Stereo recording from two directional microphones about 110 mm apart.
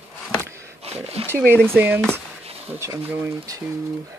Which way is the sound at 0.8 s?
70° right (ahead or behind).